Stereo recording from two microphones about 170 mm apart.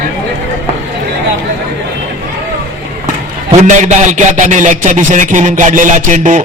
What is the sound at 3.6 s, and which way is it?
A man's voice, 45° right (ahead or behind).